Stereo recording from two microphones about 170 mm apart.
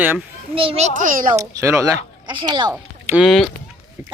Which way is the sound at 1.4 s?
15° right (ahead or behind).